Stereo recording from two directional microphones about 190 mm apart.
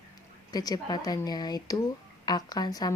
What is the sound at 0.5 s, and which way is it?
A woman's voice, 20° left (ahead or behind).